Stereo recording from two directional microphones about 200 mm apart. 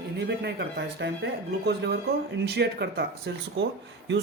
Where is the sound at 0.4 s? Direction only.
60° right (ahead or behind).